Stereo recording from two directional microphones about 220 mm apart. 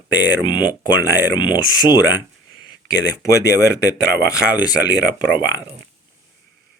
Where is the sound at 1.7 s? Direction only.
15° left (ahead or behind).